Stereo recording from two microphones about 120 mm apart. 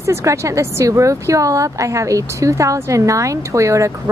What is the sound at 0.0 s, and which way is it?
Speech, 25° right (ahead or behind).